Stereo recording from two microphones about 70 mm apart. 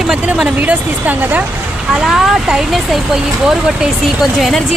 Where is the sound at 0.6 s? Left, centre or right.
Right.